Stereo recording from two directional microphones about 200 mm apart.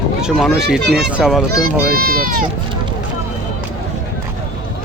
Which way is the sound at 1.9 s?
50° right (ahead or behind).